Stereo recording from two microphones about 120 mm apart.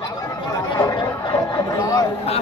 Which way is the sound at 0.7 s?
35° left (ahead or behind).